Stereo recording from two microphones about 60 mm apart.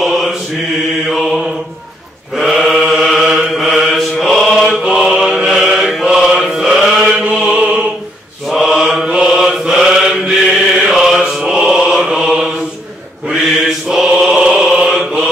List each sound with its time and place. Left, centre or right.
0.0 s mantra: centre
5.5 s chant: centre
7.2 s music: centre
8.5 s mantra: centre